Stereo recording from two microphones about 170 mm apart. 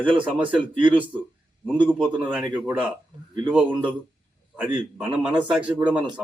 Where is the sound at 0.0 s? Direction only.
10° right (ahead or behind).